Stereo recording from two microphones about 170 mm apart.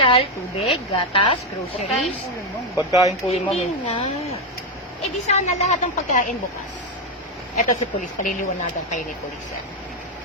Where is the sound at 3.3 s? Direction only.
35° left (ahead or behind).